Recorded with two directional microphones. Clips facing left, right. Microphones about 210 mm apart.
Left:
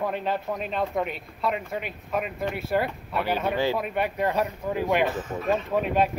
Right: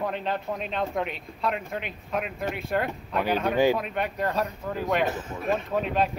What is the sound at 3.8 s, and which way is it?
Speech, 10° left (ahead or behind).